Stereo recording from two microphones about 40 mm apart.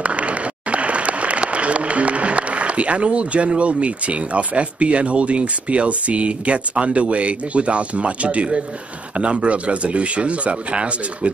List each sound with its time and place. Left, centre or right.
0.0 s speech: right